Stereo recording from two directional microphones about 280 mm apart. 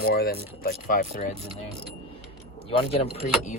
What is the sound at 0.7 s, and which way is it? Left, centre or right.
Speech, left.